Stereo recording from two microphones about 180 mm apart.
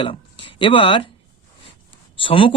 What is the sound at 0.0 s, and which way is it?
Speech, 30° left (ahead or behind).